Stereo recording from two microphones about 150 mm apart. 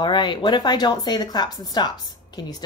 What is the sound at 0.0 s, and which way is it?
Speech, 30° left (ahead or behind).